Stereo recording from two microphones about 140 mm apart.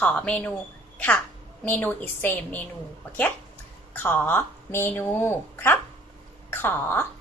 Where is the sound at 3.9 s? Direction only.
15° left (ahead or behind).